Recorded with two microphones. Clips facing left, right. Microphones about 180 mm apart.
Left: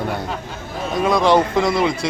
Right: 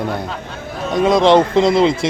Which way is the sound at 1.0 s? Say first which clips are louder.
Right 4 dB; 20° right (ahead or behind).